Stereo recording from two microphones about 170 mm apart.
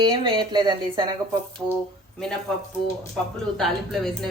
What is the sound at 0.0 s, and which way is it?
Speech, 25° right (ahead or behind).